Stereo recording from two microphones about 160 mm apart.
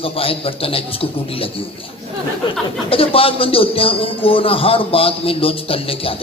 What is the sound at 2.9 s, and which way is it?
A man's voice, 35° left (ahead or behind).